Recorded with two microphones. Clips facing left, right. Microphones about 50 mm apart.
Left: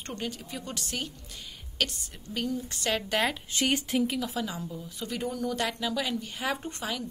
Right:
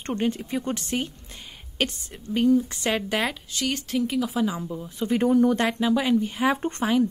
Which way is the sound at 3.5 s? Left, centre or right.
Left.